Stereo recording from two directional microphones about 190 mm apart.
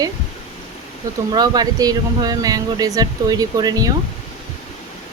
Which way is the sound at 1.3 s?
20° right (ahead or behind).